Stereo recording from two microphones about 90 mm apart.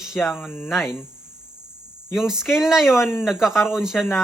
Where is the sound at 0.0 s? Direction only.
5° right (ahead or behind).